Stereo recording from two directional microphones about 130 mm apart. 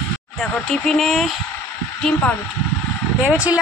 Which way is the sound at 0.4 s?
5° left (ahead or behind).